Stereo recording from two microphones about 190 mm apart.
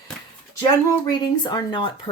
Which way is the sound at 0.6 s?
20° left (ahead or behind).